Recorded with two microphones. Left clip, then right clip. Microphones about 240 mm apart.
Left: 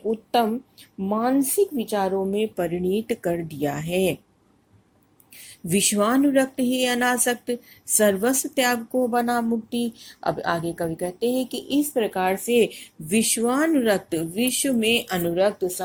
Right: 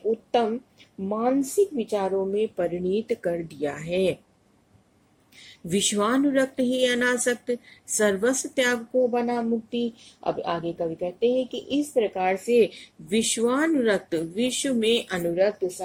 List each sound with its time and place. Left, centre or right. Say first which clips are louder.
0.1 s a sound: left 2 dB; left
1.0 s speech: left 2 dB; left
5.9 s speech: left 3 dB; centre